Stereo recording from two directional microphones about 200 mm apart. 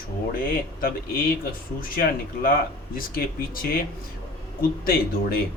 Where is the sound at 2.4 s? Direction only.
45° left (ahead or behind).